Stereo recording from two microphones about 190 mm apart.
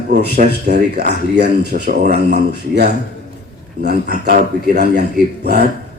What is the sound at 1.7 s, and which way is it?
Speech, 45° right (ahead or behind).